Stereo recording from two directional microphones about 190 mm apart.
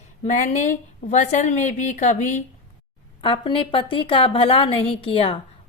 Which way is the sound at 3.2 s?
25° left (ahead or behind).